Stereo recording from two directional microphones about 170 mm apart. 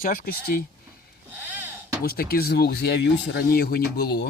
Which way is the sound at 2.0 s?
60° left (ahead or behind).